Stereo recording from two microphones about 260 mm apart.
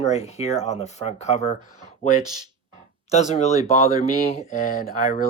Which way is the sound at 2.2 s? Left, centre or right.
Centre.